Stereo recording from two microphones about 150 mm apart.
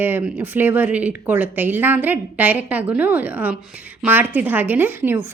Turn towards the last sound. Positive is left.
turn(degrees=-10)  # may be behind; listen again after turning